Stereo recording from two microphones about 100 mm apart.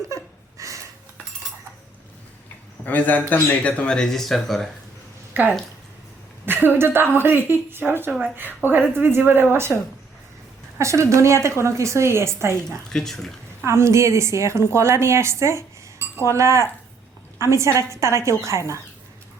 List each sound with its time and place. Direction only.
0.1 s a sound: 30° right (ahead or behind)
2.8 s speech: 20° left (ahead or behind); by 4.7 s centre (ahead or behind)
5.3 s a woman's voice: 15° right (ahead or behind)
10.8 s a woman's voice: 30° right (ahead or behind)
12.9 s speech: 5° left (ahead or behind)
13.6 s a woman's voice: 30° right (ahead or behind)